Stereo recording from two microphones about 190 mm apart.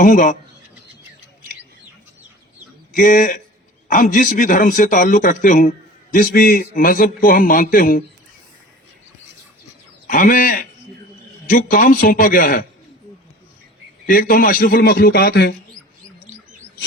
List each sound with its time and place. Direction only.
0.0 s speech: 40° left (ahead or behind)
2.9 s a man's voice: 45° left (ahead or behind)
10.1 s a man's voice: 45° left (ahead or behind)
14.1 s a man's voice: 50° left (ahead or behind)